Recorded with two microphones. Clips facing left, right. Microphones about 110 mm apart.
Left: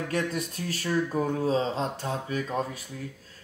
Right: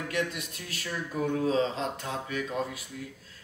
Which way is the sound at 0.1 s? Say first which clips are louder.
Left 2 dB; 40° left (ahead or behind).